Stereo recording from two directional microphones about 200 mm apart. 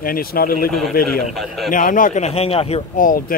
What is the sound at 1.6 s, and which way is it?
A man's voice, 40° left (ahead or behind).